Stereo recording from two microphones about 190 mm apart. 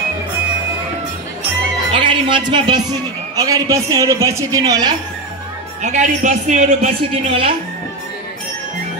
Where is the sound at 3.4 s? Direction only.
20° right (ahead or behind).